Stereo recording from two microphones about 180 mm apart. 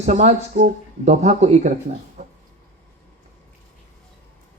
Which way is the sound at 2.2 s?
40° right (ahead or behind).